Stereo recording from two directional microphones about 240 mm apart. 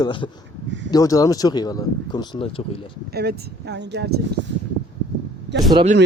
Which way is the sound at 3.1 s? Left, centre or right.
Right.